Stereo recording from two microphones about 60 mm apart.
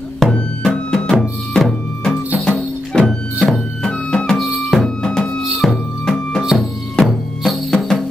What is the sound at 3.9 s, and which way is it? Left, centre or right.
Music, centre.